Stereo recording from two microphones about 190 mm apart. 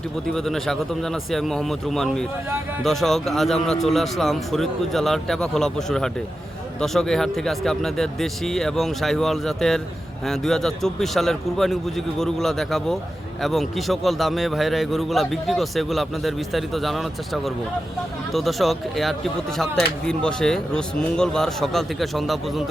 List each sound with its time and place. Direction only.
0.3 s a man's voice: centre (ahead or behind)